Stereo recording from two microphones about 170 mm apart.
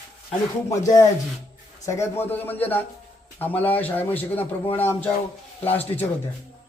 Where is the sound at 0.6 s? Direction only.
20° left (ahead or behind).